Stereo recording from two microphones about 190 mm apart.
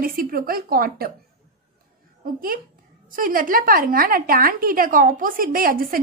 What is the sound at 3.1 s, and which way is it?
A woman's voice, 45° right (ahead or behind).